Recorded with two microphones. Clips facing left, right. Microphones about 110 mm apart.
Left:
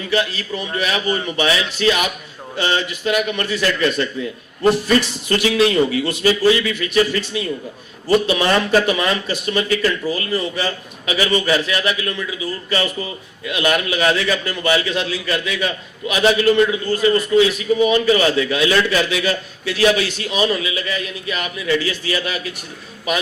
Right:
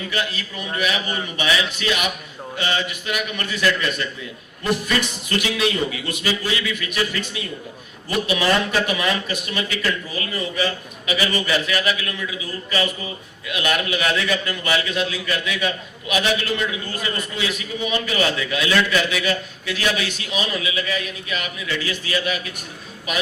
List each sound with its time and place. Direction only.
0.1 s a man's voice: 30° left (ahead or behind)
13.5 s a man's voice: 35° left (ahead or behind)